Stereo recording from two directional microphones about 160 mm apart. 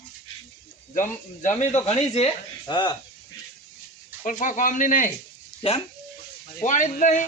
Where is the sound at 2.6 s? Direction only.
30° left (ahead or behind).